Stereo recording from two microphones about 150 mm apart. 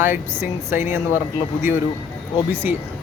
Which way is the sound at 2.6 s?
10° right (ahead or behind).